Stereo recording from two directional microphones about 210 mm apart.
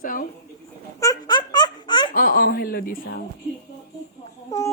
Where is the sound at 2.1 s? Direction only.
45° left (ahead or behind).